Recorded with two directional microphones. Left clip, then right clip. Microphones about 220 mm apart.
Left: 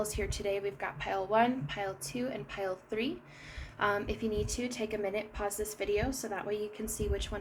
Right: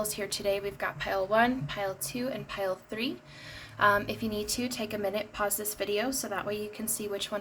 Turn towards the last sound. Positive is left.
turn(degrees=-20)  # may be behind; listen again after turning